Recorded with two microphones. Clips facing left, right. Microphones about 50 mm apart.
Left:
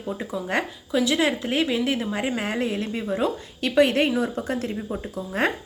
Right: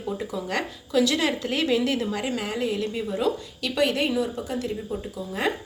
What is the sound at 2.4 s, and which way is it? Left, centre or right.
A woman's voice, left.